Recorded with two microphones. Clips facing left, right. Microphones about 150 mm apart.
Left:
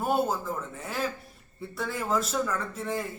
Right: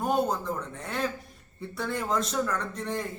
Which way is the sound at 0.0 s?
5° left (ahead or behind).